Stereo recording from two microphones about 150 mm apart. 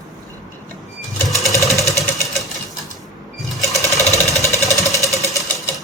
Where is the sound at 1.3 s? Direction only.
Centre (ahead or behind).